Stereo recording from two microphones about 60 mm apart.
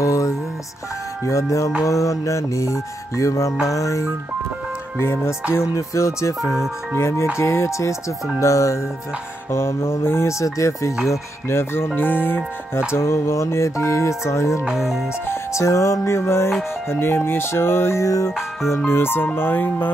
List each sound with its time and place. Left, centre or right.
0.0 s music: left
4.9 s music: left
9.5 s music: left
10.4 s music: left
11.1 s music: left
11.9 s speech: left
12.9 s music: left
14.6 s music: centre
15.2 s music: left
18.0 s music: left
18.9 s speech: left